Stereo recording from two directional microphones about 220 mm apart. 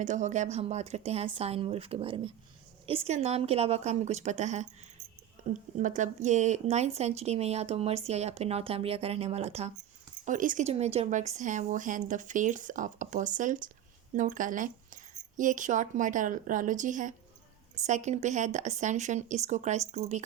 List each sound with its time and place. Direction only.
0.0 s speech: 35° right (ahead or behind)
5.7 s speech: 35° right (ahead or behind)